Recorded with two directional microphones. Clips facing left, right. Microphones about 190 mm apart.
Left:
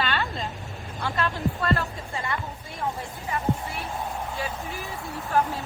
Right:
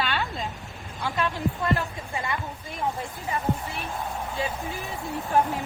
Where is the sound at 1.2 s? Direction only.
20° right (ahead or behind).